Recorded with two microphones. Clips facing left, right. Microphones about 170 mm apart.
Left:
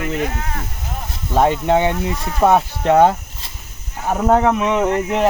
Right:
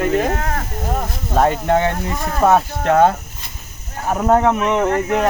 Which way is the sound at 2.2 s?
55° right (ahead or behind).